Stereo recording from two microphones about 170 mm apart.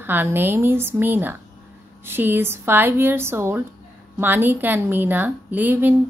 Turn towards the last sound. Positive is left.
turn(degrees=-10)  # may be behind; listen again after turning